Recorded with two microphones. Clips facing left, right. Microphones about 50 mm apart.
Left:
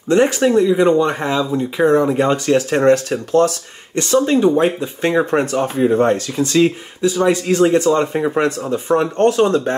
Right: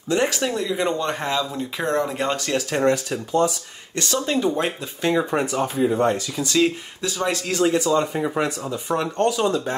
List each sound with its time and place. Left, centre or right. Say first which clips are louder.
0.2 s speech: left 9 dB; left
1.4 s speech: left 9 dB; left
1.9 s speech: left 8 dB; centre
2.5 s speech: left 7 dB; left
3.1 s speech: left 6 dB; left
3.9 s speech: left 8 dB; left
4.6 s speech: left 9 dB; centre
5.0 s speech: left 5 dB; left
6.6 s speech: left 5 dB; centre
7.7 s speech: left 6 dB; left
9.2 s speech: left 6 dB; left